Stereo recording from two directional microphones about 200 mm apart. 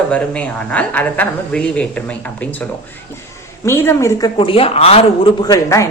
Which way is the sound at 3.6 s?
10° left (ahead or behind).